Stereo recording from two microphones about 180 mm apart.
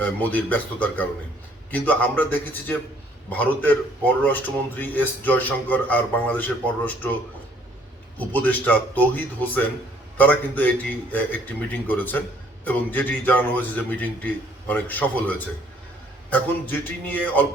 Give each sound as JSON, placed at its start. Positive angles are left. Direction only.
{"t": 0.0, "sound": "a man's voice", "side_deg": 10}
{"t": 8.2, "sound": "a man's voice", "side_deg": 10}